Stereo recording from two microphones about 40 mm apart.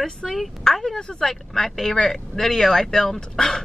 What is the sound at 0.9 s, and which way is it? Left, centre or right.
A woman's voice, centre.